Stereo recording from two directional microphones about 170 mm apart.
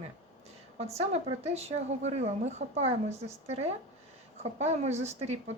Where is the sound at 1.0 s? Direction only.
40° right (ahead or behind).